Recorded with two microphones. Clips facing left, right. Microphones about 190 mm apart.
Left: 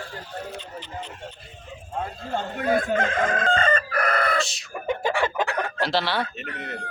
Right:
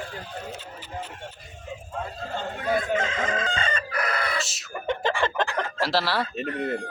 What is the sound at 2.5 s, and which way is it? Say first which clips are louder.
Chicken: left 2 dB; 55° left (ahead or behind).